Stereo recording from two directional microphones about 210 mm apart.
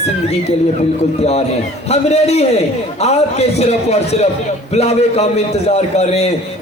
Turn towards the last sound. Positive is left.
turn(degrees=30)  # may be behind; listen again after turning